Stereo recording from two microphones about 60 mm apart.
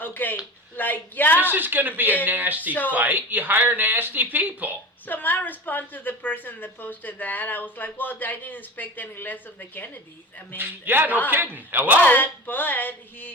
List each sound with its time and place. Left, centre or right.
0.0 s a woman's voice: left
1.4 s speech: right
5.0 s a woman's voice: left
10.6 s speech: right
12.0 s a woman's voice: left